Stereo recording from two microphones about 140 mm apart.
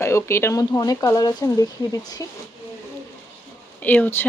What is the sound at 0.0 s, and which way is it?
Speech, 20° left (ahead or behind).